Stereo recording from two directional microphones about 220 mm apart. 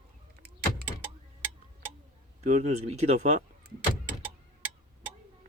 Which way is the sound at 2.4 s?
30° right (ahead or behind).